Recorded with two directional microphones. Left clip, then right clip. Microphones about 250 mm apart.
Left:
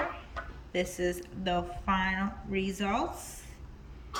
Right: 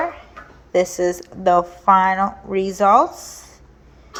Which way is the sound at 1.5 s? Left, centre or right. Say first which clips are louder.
Right 17 dB; right.